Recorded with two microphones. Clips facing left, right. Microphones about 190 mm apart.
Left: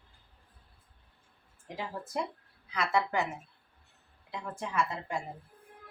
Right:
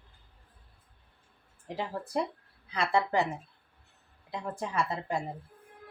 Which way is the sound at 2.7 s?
30° right (ahead or behind).